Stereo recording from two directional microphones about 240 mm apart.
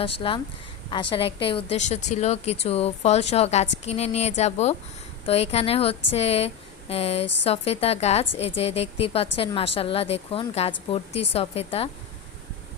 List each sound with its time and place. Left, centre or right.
0.2 s a woman's voice: left